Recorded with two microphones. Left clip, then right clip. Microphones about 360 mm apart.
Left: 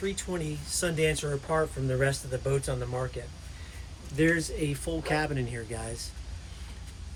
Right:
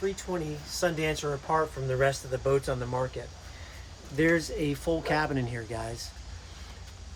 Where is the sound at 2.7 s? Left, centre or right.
Right.